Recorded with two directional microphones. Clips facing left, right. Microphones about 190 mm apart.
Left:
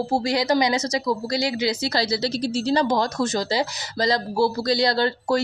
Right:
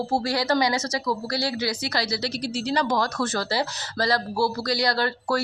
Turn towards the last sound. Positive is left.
turn(degrees=25)  # may be behind; listen again after turning